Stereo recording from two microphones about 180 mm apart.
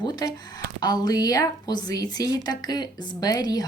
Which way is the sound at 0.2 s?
20° left (ahead or behind).